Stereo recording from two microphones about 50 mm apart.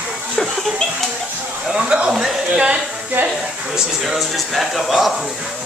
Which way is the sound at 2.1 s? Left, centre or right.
Centre.